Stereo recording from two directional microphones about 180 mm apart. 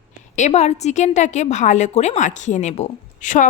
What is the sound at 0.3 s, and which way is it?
A woman's voice, 40° left (ahead or behind).